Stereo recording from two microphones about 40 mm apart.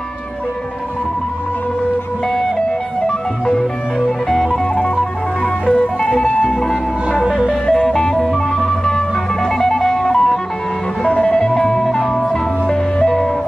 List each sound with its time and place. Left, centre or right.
3.1 s music: centre
4.7 s music: left
7.1 s music: centre
7.6 s music: centre